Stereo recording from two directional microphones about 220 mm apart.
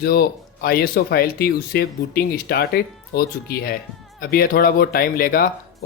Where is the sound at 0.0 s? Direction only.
45° left (ahead or behind).